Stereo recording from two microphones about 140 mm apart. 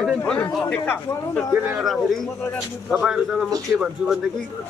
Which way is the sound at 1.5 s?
15° right (ahead or behind).